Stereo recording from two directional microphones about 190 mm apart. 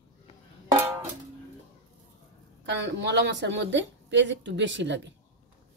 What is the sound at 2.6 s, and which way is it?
A woman's voice, 70° right (ahead or behind).